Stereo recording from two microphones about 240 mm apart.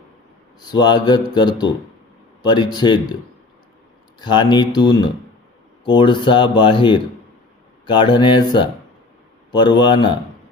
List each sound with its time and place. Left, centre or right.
0.7 s mantra: centre
4.2 s mantra: centre
5.8 s speech: left